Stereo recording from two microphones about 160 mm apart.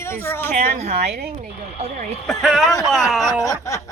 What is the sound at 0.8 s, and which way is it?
Speech, 40° right (ahead or behind).